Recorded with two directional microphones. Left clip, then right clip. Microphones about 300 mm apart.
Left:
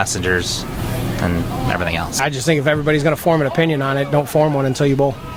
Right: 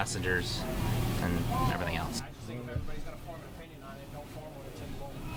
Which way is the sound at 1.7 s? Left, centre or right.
Left.